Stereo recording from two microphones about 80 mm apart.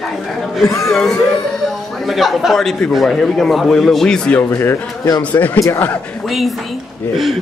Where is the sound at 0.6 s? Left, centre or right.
Left.